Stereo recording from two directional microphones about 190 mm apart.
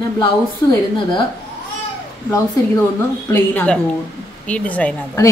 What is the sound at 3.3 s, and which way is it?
A woman's voice, 10° left (ahead or behind).